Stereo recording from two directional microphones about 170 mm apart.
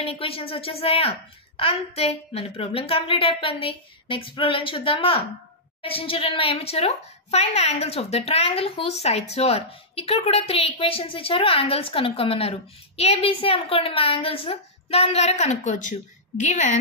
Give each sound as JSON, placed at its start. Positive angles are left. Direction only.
{"t": 0.0, "sound": "a woman's voice", "side_deg": 35}